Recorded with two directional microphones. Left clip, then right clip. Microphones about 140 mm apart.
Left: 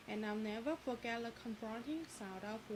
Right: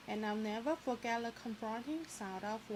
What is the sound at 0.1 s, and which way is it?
Speech, 40° right (ahead or behind).